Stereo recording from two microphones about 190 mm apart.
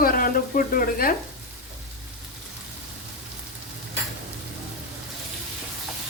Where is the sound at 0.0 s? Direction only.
50° left (ahead or behind).